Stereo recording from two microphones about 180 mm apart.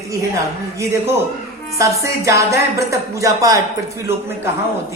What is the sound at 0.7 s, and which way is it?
Speech, 15° right (ahead or behind).